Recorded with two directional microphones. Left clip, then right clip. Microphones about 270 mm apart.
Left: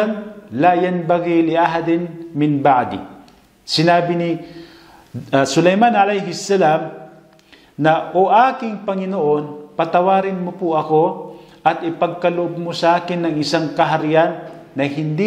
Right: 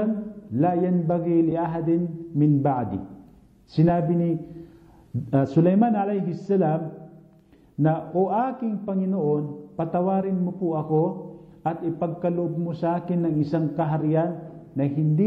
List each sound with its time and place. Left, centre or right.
0.0 s a man's voice: centre
11.0 s speech: left
11.6 s a man's voice: centre